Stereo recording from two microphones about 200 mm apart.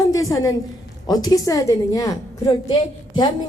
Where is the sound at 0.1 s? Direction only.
15° left (ahead or behind).